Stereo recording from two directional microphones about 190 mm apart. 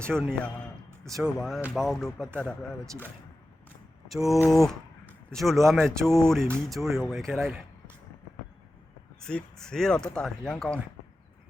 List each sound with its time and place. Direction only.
0.1 s speech: centre (ahead or behind)
0.9 s a sound: 15° right (ahead or behind)
1.2 s speech: centre (ahead or behind)
2.8 s speech: 15° right (ahead or behind)
4.1 s speech: centre (ahead or behind)
9.2 s speech: 5° left (ahead or behind)